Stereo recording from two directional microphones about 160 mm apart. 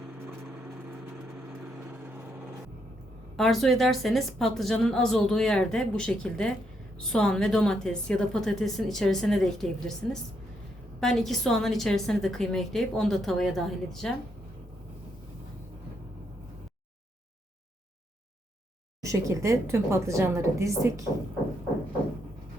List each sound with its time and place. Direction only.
3.3 s a woman's voice: centre (ahead or behind)
11.0 s a woman's voice: centre (ahead or behind)
19.0 s a woman's voice: 15° right (ahead or behind)